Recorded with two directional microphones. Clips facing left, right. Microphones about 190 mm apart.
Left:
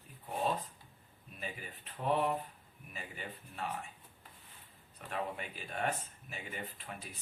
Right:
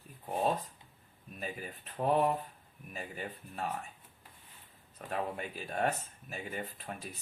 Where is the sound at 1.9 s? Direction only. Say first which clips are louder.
Right 4 dB; 40° right (ahead or behind).